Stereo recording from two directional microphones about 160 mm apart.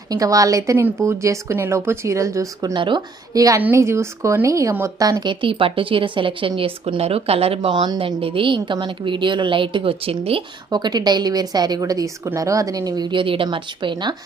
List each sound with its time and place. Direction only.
0.1 s a woman's voice: 20° right (ahead or behind)
10.7 s a woman's voice: 25° right (ahead or behind)